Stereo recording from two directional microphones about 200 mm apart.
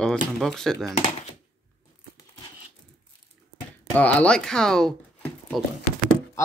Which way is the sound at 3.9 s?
5° left (ahead or behind).